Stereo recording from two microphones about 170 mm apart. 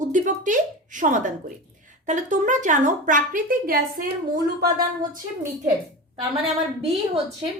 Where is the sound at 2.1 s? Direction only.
50° right (ahead or behind).